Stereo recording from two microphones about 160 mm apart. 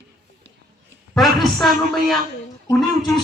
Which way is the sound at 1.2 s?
Centre (ahead or behind).